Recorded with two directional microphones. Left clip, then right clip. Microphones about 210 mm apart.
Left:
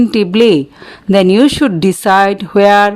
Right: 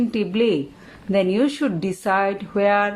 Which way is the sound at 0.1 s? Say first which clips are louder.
Left 11 dB; 50° left (ahead or behind).